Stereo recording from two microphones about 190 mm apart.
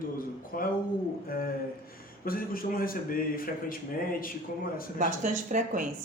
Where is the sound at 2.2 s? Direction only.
50° left (ahead or behind).